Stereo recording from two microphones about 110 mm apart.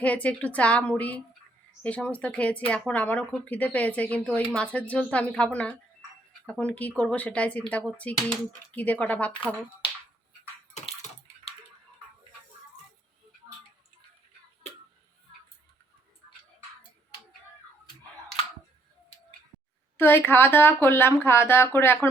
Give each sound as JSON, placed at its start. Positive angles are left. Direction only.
{"t": 0.0, "sound": "speech", "side_deg": 10}
{"t": 20.0, "sound": "speech", "side_deg": 20}